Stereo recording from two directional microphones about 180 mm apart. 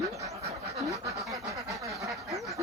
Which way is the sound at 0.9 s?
20° right (ahead or behind).